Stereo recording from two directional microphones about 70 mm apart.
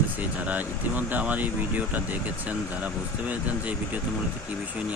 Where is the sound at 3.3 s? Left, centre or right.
Right.